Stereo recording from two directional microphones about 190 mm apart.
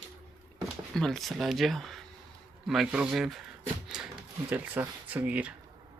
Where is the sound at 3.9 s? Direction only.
5° right (ahead or behind).